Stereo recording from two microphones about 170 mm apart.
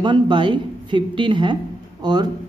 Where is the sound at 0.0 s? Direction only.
25° right (ahead or behind).